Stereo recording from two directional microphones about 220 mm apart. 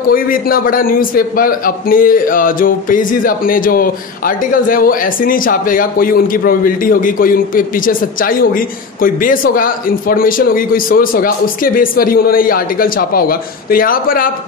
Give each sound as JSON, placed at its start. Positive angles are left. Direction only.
{"t": 0.1, "sound": "a man's voice", "side_deg": 40}